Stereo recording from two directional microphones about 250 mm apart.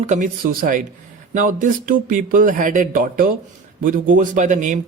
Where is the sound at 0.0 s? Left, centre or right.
Right.